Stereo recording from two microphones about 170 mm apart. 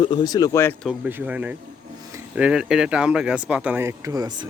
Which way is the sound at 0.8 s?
10° right (ahead or behind).